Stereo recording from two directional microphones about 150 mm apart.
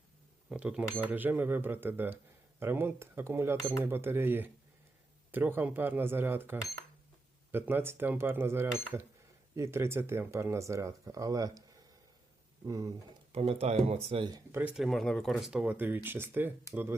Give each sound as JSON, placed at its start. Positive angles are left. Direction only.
{"t": 0.5, "sound": "speech", "side_deg": -10}
{"t": 12.6, "sound": "speech", "side_deg": -25}
{"t": 13.3, "sound": "speech", "side_deg": -40}
{"t": 14.3, "sound": "speech", "side_deg": -25}
{"t": 14.6, "sound": "speech", "side_deg": -10}
{"t": 14.8, "sound": "speech", "side_deg": 0}